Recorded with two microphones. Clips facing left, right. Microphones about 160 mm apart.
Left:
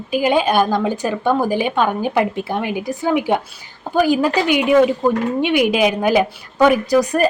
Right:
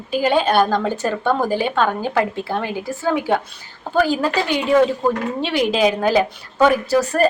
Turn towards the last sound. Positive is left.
turn(degrees=15)  # may be behind; listen again after turning